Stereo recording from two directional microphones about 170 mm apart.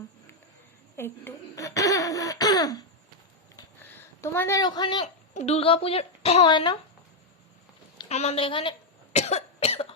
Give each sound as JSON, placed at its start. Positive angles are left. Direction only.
{"t": 0.9, "sound": "laughter", "side_deg": 15}
{"t": 4.2, "sound": "a woman's voice", "side_deg": 15}
{"t": 5.0, "sound": "a woman's voice", "side_deg": 40}
{"t": 8.1, "sound": "a woman's voice", "side_deg": 40}
{"t": 9.1, "sound": "cough", "side_deg": 40}